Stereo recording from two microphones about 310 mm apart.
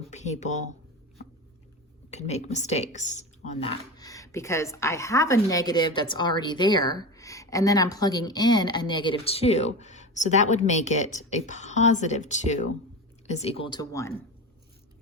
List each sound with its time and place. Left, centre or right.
0.1 s speech: left
2.0 s speech: left